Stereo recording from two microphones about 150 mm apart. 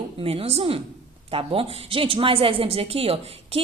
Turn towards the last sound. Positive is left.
turn(degrees=-40)  # may be behind; listen again after turning